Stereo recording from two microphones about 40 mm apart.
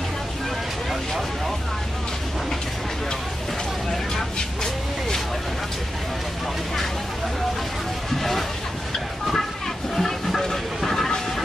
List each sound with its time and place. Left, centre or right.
8.2 s vehicle: centre
9.9 s vehicle: centre